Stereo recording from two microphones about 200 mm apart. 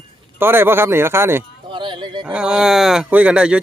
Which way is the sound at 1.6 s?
25° right (ahead or behind).